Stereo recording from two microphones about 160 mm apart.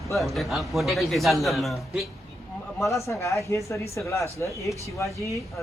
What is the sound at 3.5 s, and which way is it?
Speech, 20° left (ahead or behind).